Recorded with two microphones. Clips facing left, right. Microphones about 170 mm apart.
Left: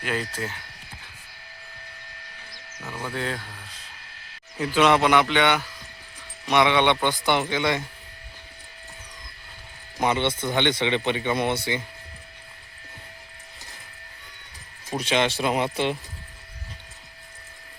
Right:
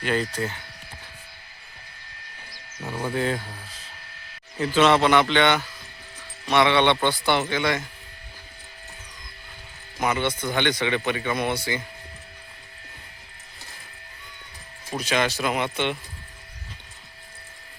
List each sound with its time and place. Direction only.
0.0 s speech: 5° left (ahead or behind)
2.8 s speech: 20° right (ahead or behind)
3.2 s speech: 5° right (ahead or behind)
4.5 s speech: 10° left (ahead or behind)
10.0 s speech: 25° left (ahead or behind)
14.9 s speech: 25° left (ahead or behind)